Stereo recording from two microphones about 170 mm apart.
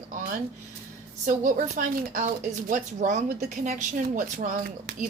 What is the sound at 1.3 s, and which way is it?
A woman's voice, 50° right (ahead or behind).